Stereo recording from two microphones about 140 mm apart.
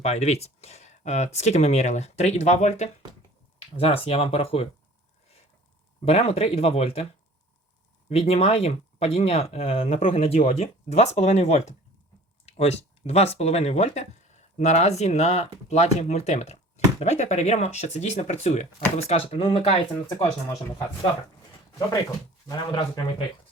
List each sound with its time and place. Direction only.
0.0 s speech: 50° left (ahead or behind)
3.8 s speech: 45° left (ahead or behind)
6.1 s speech: 50° left (ahead or behind)
8.1 s speech: 45° left (ahead or behind)
20.1 s speech: 25° left (ahead or behind)
22.4 s speech: 35° left (ahead or behind)